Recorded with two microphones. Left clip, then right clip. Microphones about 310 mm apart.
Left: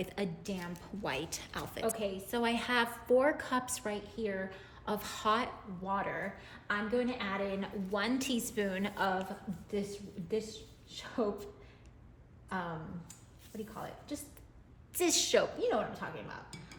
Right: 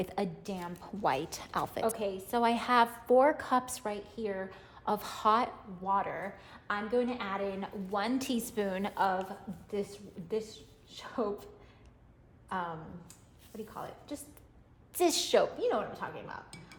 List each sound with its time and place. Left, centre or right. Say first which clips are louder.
0.0 s a woman's voice: right 3 dB; centre
10.9 s a woman's voice: right 1 dB; centre
13.5 s a woman's voice: right 1 dB; centre